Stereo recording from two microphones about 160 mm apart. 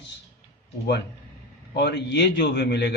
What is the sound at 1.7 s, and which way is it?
Speech, 90° left.